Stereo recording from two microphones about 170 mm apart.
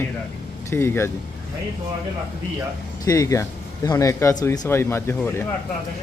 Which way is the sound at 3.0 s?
20° left (ahead or behind).